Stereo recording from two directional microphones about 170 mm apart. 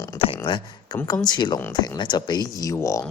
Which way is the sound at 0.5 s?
30° left (ahead or behind).